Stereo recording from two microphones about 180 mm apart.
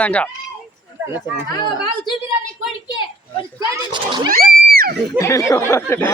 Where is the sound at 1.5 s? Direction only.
25° left (ahead or behind).